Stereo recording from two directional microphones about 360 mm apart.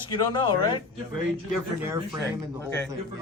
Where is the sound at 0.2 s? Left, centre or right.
Centre.